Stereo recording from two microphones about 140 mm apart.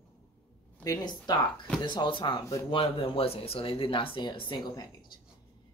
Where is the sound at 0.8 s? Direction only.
30° left (ahead or behind).